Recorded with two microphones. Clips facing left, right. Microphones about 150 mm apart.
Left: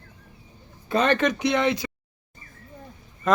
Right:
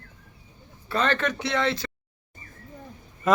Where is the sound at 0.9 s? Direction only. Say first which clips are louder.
Left 4 dB; 15° left (ahead or behind).